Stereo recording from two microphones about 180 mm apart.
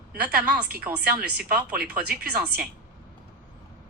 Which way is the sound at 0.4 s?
5° right (ahead or behind).